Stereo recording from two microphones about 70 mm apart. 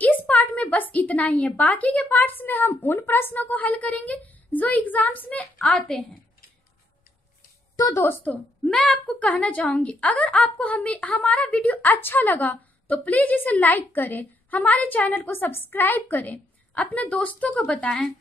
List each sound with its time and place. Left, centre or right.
0.0 s a woman's voice: left
7.9 s a woman's voice: left
8.6 s a woman's voice: centre